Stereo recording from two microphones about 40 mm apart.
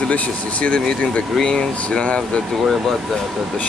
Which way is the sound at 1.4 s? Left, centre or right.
Centre.